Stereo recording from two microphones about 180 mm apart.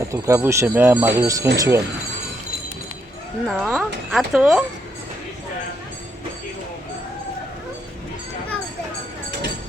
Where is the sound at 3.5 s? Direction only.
Centre (ahead or behind).